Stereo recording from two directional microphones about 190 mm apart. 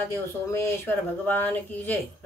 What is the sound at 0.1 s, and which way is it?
Speech, 10° left (ahead or behind).